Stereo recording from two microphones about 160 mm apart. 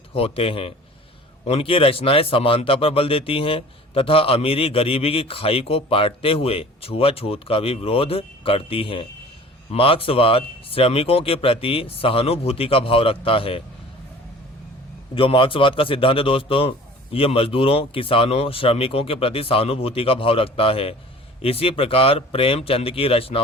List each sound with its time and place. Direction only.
0.1 s speech: 35° left (ahead or behind)
15.1 s speech: 35° left (ahead or behind)